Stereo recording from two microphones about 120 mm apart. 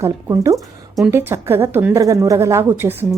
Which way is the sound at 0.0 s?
25° right (ahead or behind).